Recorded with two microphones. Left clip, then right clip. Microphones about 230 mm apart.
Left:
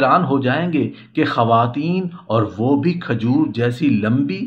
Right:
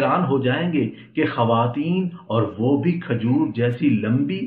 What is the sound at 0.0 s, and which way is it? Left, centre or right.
Speech, left.